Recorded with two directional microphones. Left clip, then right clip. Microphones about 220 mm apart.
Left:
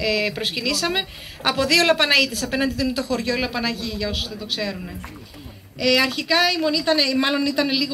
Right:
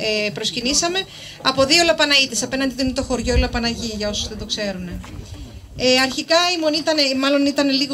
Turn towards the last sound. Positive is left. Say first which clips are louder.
# right 3 dB
turn(degrees=-40)  # may be behind; listen again after turning